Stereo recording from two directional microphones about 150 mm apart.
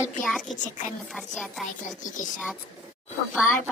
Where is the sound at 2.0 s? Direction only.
60° left (ahead or behind).